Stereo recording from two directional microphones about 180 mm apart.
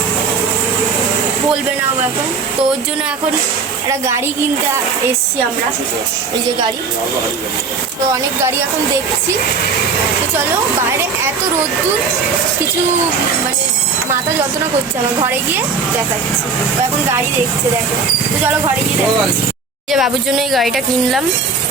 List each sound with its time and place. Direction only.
3.8 s a woman's voice: 15° right (ahead or behind)
19.9 s speech: centre (ahead or behind)